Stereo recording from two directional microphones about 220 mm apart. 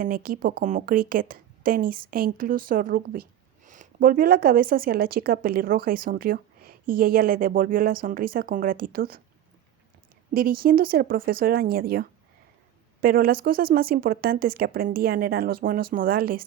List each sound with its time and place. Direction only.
0.0 s speech: 40° right (ahead or behind)
10.3 s speech: 40° right (ahead or behind)